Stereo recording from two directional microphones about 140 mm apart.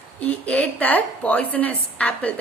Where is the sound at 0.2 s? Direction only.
10° left (ahead or behind).